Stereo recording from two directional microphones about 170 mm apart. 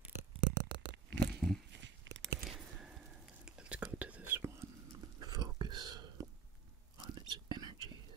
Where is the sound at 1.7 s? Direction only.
90° right.